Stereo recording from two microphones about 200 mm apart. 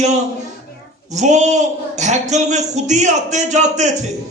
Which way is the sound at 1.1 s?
35° right (ahead or behind).